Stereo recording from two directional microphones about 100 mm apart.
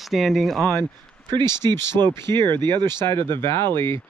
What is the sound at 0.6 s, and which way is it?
Speech, 20° left (ahead or behind).